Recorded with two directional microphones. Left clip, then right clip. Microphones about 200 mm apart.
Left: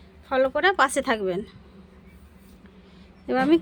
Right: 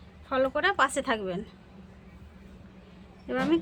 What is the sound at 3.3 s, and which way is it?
Speech, 35° left (ahead or behind).